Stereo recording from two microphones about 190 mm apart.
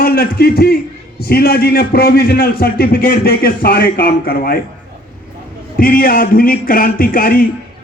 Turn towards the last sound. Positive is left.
turn(degrees=50)  # may be behind; listen again after turning